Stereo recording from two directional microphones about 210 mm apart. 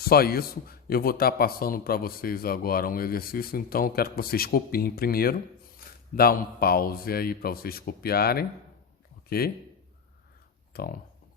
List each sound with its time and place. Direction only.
0.0 s speech: 45° left (ahead or behind)
10.7 s speech: 45° left (ahead or behind)